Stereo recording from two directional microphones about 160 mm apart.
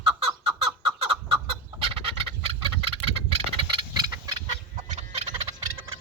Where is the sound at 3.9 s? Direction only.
25° right (ahead or behind).